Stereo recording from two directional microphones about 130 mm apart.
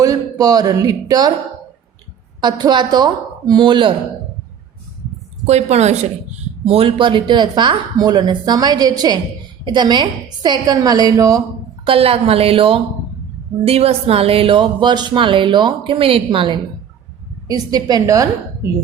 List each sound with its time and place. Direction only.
0.0 s speech: 30° right (ahead or behind)
2.4 s speech: 35° right (ahead or behind)
5.5 s a woman's voice: 55° right (ahead or behind)
6.7 s speech: 45° right (ahead or behind); by 11.4 s 25° right (ahead or behind)
11.9 s a woman's voice: 45° right (ahead or behind)
17.5 s a woman's voice: 30° right (ahead or behind)